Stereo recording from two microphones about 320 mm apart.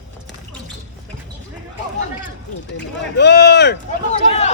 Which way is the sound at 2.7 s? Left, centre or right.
Left.